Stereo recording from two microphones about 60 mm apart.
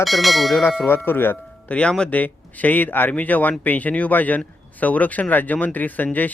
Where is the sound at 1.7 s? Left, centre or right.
Centre.